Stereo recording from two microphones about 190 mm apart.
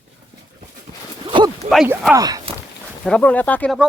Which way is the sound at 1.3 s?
25° right (ahead or behind).